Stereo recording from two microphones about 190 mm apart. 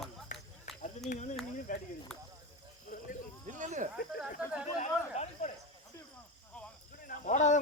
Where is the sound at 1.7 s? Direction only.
45° left (ahead or behind).